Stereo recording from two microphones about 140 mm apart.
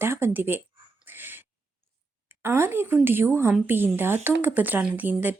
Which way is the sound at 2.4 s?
15° right (ahead or behind).